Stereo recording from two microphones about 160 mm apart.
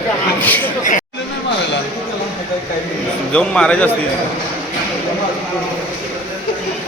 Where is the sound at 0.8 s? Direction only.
55° left (ahead or behind).